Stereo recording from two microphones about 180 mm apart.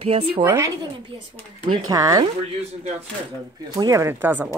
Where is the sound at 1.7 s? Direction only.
20° right (ahead or behind).